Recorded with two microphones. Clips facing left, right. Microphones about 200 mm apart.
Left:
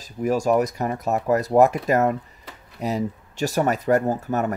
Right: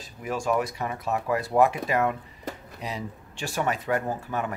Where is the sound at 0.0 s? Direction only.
40° left (ahead or behind).